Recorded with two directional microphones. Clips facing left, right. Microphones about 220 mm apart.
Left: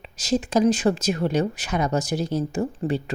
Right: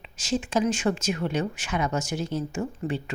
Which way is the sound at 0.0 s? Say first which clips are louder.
Left 4 dB; 40° left (ahead or behind).